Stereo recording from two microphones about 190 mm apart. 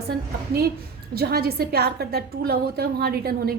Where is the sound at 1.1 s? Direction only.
55° right (ahead or behind).